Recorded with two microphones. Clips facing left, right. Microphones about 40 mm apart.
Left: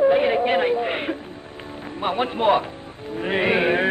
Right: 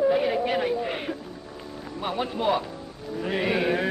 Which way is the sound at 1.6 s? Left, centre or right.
Left.